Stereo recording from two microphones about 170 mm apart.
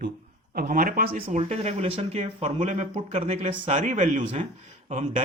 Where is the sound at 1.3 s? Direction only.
35° right (ahead or behind).